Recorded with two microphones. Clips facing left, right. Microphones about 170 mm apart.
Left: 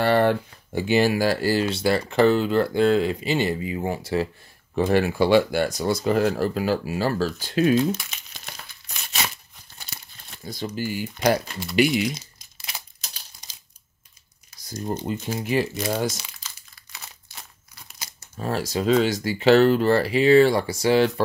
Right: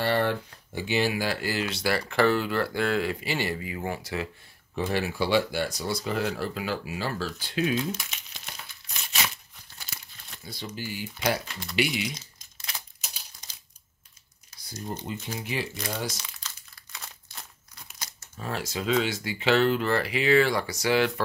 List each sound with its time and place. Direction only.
0.0 s speech: 55° left (ahead or behind); by 4.3 s 30° left (ahead or behind)
4.7 s speech: 50° left (ahead or behind)
9.8 s tearing: 25° left (ahead or behind)
10.4 s speech: 45° left (ahead or behind)
12.5 s a sound: 10° left (ahead or behind)
14.6 s speech: 40° left (ahead or behind)
16.3 s crumpling: 5° left (ahead or behind)
18.4 s speech: 40° left (ahead or behind)